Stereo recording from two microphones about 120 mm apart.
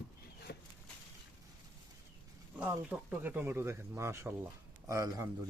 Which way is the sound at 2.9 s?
15° right (ahead or behind).